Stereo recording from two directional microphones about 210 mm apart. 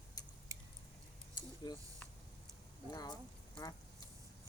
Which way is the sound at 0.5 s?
15° right (ahead or behind).